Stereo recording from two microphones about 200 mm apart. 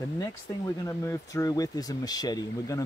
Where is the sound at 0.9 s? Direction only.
15° left (ahead or behind).